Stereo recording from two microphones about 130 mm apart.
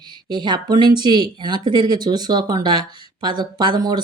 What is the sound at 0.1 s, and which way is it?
Speech, 35° right (ahead or behind).